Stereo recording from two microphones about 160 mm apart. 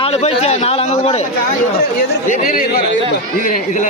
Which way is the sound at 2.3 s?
65° left (ahead or behind).